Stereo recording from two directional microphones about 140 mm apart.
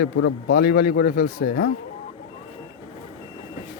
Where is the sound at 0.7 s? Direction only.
90° left.